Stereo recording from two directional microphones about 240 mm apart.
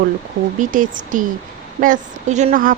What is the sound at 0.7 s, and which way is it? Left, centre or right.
Speech, right.